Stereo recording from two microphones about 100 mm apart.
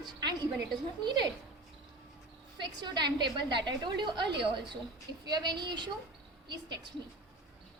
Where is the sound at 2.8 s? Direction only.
45° right (ahead or behind).